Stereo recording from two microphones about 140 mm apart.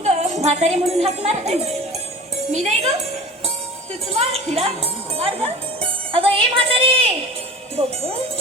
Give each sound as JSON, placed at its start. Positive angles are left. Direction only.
{"t": 0.0, "sound": "speech", "side_deg": -50}
{"t": 4.1, "sound": "a woman's voice", "side_deg": -45}